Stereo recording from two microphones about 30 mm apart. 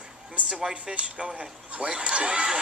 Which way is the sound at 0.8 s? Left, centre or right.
Right.